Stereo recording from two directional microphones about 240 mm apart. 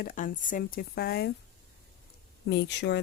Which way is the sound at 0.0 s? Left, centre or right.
Left.